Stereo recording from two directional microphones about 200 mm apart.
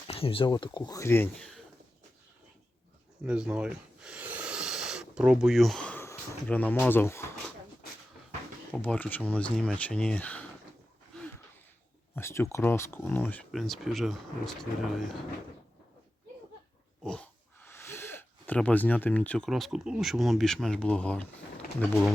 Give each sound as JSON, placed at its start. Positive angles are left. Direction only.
{"t": 0.1, "sound": "speech", "side_deg": 25}
{"t": 3.2, "sound": "a sound", "side_deg": -5}
{"t": 8.7, "sound": "speech", "side_deg": 5}
{"t": 12.1, "sound": "speech", "side_deg": 10}
{"t": 17.0, "sound": "speech", "side_deg": 5}